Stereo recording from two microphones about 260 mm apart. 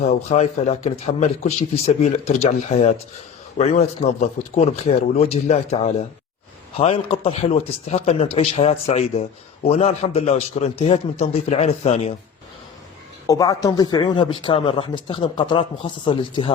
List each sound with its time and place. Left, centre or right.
0.0 s speech: left
13.2 s speech: centre